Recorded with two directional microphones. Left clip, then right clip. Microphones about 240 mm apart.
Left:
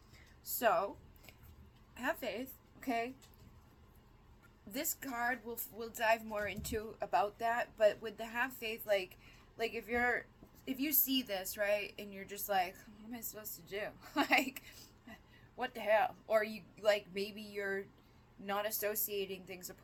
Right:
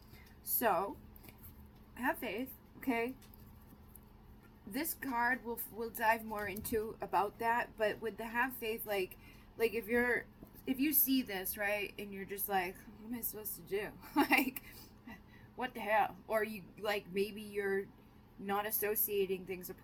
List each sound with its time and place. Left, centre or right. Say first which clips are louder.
0.6 s a woman's voice: left 1 dB; centre
2.0 s a woman's voice: right 1 dB; centre
4.7 s a woman's voice: right 3 dB; centre